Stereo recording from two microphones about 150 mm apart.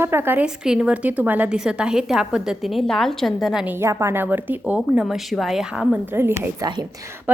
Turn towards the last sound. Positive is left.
turn(degrees=-15)  # may be behind; listen again after turning